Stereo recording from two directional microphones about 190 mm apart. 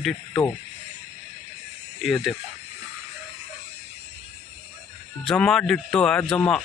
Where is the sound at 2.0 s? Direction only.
Centre (ahead or behind).